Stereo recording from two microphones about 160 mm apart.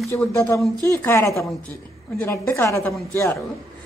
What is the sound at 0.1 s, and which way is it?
A woman's voice, 15° left (ahead or behind).